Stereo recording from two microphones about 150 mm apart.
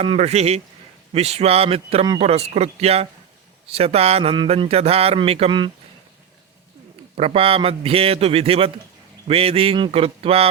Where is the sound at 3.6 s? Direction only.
40° right (ahead or behind).